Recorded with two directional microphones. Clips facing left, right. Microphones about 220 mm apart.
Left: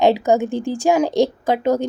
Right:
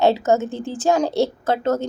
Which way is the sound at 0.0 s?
15° left (ahead or behind).